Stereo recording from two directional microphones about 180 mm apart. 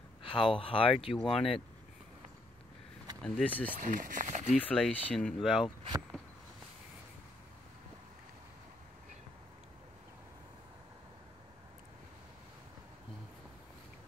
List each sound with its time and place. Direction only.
0.2 s speech: 30° left (ahead or behind)
3.2 s speech: 5° left (ahead or behind)
3.8 s speech: 45° right (ahead or behind)
4.6 s speech: 5° left (ahead or behind)